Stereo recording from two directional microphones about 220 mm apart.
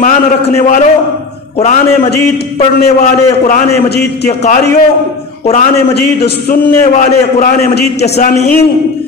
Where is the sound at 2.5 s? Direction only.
30° left (ahead or behind).